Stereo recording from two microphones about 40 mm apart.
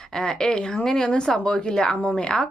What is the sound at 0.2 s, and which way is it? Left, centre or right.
A woman's voice, centre.